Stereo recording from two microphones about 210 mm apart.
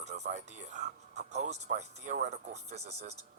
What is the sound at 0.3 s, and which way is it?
Speech, 35° right (ahead or behind).